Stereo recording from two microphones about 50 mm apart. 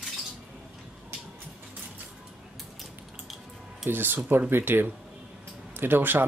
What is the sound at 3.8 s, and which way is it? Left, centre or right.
Speech, right.